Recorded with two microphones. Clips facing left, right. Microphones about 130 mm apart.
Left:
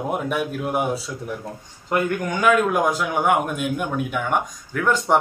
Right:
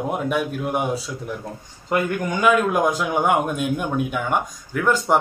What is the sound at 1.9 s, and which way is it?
Speech, 15° right (ahead or behind).